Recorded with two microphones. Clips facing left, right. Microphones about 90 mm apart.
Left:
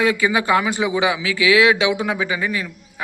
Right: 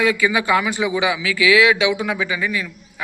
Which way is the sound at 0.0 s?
35° left (ahead or behind).